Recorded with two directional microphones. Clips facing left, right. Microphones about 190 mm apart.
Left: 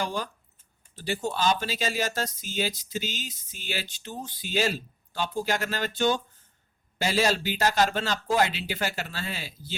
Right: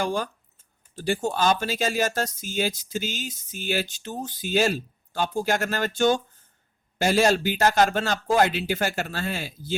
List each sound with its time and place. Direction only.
0.0 s speech: 50° right (ahead or behind)